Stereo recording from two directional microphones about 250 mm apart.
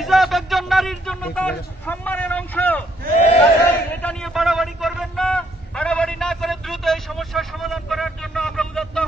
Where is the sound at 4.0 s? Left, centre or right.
Centre.